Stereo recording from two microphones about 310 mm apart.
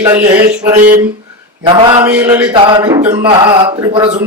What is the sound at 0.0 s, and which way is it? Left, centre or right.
Speech, centre.